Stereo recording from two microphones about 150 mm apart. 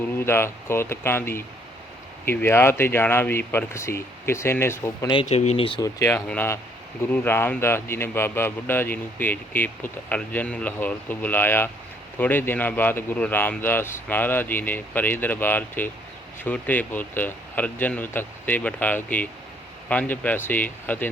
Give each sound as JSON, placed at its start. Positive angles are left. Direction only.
{"t": 0.2, "sound": "speech", "side_deg": 15}
{"t": 5.2, "sound": "speech", "side_deg": 50}
{"t": 5.8, "sound": "speech", "side_deg": 20}